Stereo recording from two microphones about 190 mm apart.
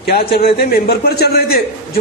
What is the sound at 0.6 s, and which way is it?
Speech, 55° left (ahead or behind).